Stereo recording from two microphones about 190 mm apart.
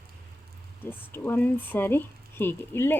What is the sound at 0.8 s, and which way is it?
Speech, 10° left (ahead or behind).